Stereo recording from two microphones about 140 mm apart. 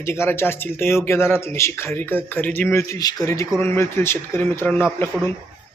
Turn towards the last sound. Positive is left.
turn(degrees=15)  # may be behind; listen again after turning